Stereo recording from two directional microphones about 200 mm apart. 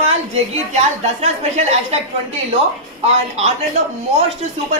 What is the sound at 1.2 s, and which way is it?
Speech, 35° right (ahead or behind).